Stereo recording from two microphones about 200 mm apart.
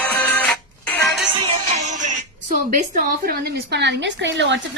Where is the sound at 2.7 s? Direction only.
40° right (ahead or behind); by 4.6 s 65° right (ahead or behind).